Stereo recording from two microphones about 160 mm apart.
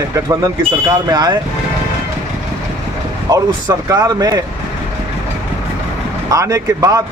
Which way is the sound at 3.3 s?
25° right (ahead or behind).